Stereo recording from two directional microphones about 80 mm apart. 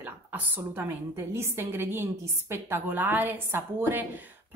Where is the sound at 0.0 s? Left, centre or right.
Right.